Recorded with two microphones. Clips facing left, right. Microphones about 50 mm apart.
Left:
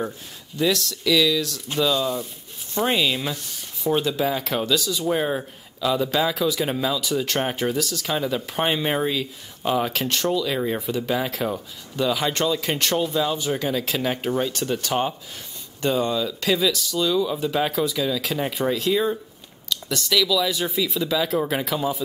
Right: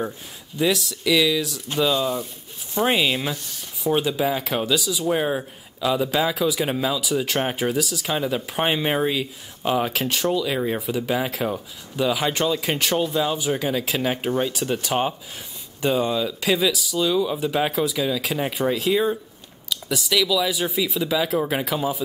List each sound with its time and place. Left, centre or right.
0.6 s speech: centre